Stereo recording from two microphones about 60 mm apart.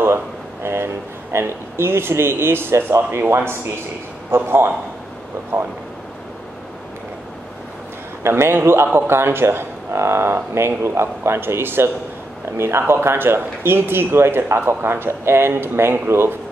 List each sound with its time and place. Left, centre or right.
0.7 s speech: right
5.5 s speech: right
8.2 s speech: right